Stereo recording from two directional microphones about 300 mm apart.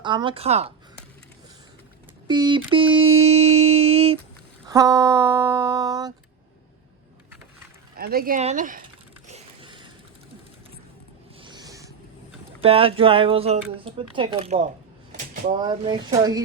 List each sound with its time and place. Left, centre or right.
0.0 s speech: centre
2.2 s a sound: centre
4.7 s speech: centre
7.9 s speech: right
9.2 s a sound: centre
11.4 s owl: centre
12.6 s speech: centre
15.6 s speech: centre